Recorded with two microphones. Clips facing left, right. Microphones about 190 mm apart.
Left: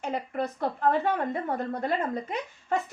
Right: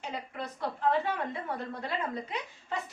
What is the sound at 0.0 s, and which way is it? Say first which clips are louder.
A woman's voice: left 8 dB; 50° left (ahead or behind).